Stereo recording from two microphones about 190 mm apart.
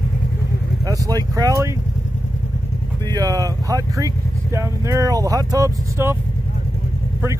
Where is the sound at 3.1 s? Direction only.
20° right (ahead or behind).